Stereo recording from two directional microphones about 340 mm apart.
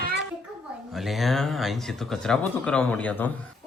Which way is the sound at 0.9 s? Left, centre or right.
Centre.